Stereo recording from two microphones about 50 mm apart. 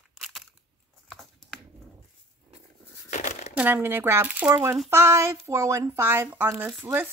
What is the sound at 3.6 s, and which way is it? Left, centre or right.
Speech, right.